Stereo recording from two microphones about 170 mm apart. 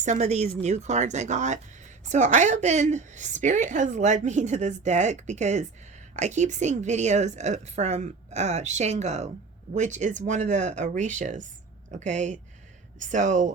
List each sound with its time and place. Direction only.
0.0 s speech: 45° right (ahead or behind)